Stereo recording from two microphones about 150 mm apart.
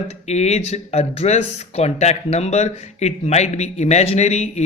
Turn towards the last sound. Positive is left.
turn(degrees=50)  # may be behind; listen again after turning